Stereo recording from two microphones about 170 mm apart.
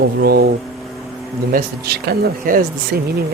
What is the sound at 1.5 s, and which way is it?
Speech, 70° right (ahead or behind).